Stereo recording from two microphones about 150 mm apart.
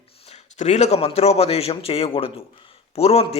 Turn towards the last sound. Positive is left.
turn(degrees=45)  # may be behind; listen again after turning